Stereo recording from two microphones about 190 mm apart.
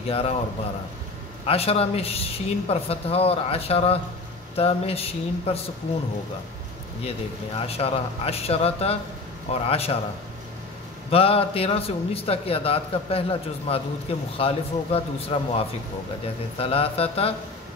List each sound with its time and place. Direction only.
0.1 s a man's voice: 30° left (ahead or behind)
1.4 s a man's voice: 30° left (ahead or behind)
7.0 s a man's voice: 30° left (ahead or behind)
11.1 s a man's voice: 30° left (ahead or behind)